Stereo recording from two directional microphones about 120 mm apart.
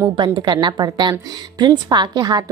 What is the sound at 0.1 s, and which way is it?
A woman's voice, 35° right (ahead or behind).